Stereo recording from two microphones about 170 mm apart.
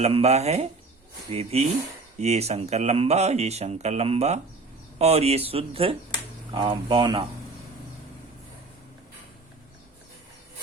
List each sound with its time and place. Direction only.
0.0 s speech: 40° right (ahead or behind)